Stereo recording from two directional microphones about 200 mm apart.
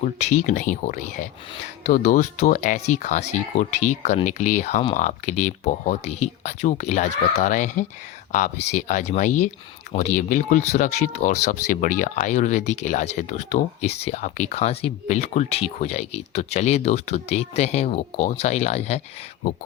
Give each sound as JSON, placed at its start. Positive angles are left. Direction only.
{"t": 0.0, "sound": "speech", "side_deg": 35}